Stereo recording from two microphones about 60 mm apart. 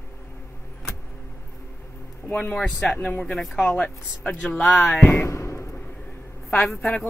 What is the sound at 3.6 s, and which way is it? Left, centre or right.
Speech, left.